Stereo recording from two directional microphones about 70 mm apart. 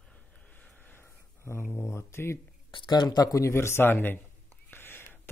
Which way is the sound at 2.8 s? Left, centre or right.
Left.